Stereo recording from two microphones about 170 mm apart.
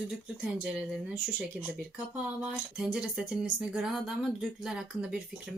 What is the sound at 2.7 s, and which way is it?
Speech, 5° right (ahead or behind).